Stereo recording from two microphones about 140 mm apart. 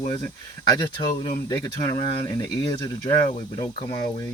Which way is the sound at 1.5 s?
30° left (ahead or behind).